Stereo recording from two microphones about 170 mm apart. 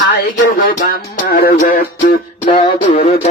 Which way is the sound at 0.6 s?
55° left (ahead or behind).